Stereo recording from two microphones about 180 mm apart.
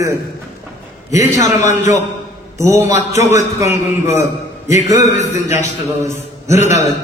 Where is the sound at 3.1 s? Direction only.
40° left (ahead or behind).